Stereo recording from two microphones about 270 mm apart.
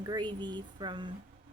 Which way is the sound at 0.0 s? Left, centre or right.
Centre.